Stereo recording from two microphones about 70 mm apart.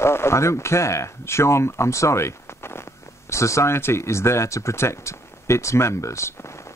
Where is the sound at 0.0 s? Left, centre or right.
Left.